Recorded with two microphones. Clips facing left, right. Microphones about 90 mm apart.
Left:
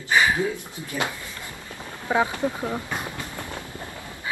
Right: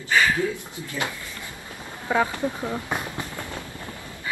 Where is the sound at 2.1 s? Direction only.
15° left (ahead or behind).